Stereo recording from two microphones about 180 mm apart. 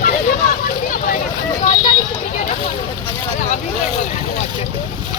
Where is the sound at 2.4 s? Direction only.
40° left (ahead or behind).